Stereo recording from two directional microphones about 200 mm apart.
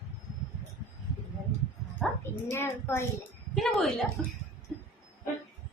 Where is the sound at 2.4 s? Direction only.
10° left (ahead or behind).